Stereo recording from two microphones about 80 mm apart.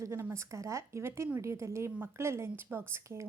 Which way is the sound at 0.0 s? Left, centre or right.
Right.